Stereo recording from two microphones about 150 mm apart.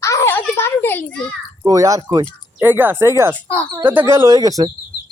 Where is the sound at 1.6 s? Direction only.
20° right (ahead or behind).